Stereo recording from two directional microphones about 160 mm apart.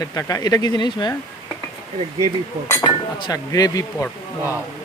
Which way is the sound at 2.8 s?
25° left (ahead or behind).